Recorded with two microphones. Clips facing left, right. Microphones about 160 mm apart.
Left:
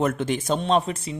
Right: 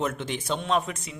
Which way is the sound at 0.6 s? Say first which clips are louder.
Left 5 dB; 30° left (ahead or behind).